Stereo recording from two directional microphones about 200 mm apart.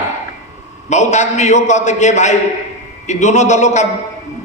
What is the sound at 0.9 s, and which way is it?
A man's voice, 35° left (ahead or behind).